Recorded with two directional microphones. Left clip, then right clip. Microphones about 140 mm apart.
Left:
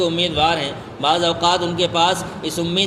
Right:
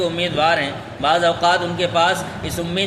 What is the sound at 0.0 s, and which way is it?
A man's voice, 35° left (ahead or behind).